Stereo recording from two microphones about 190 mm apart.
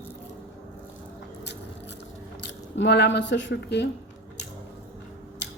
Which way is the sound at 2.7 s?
65° left (ahead or behind).